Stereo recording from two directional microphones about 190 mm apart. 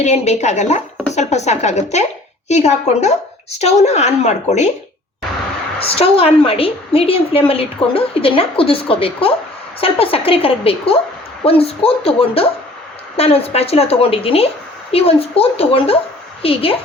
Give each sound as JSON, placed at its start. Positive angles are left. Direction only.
{"t": 0.0, "sound": "speech", "side_deg": 35}
{"t": 5.8, "sound": "a woman's voice", "side_deg": 30}